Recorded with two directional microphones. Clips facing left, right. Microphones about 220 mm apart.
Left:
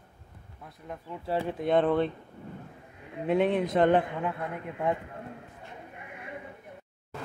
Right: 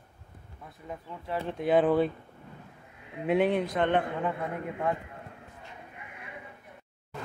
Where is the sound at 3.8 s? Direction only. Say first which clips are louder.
Left 6 dB; 35° left (ahead or behind).